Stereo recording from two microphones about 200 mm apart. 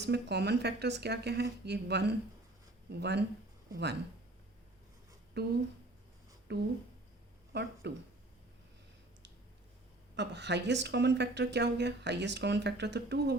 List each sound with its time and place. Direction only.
0.0 s speech: 55° right (ahead or behind)
5.4 s speech: 55° right (ahead or behind)
10.2 s speech: 60° right (ahead or behind)